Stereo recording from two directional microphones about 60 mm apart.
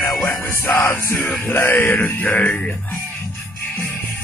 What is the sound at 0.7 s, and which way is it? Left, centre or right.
Music, left.